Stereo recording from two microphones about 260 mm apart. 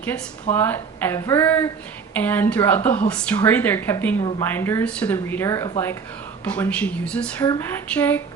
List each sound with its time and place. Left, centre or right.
0.5 s speech: centre